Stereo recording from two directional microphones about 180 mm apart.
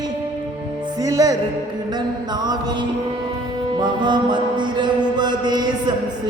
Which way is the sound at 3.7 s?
25° right (ahead or behind).